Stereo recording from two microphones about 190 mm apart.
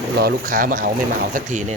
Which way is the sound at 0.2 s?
50° right (ahead or behind).